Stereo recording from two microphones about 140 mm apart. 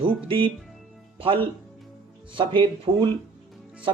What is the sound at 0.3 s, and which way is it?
Speech, 40° right (ahead or behind).